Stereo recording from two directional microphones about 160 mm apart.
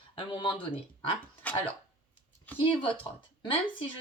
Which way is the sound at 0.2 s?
30° left (ahead or behind).